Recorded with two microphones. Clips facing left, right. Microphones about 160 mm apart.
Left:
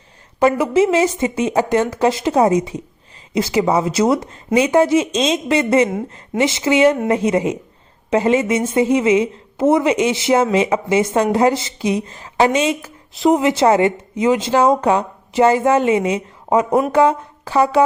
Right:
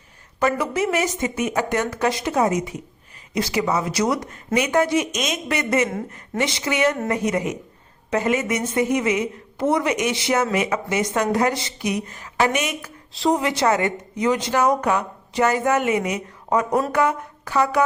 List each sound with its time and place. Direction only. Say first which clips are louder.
0.3 s a woman's voice: left 7 dB; 25° left (ahead or behind)